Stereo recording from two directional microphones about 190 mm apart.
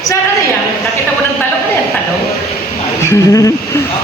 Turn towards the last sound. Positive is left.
turn(degrees=15)  # may be behind; listen again after turning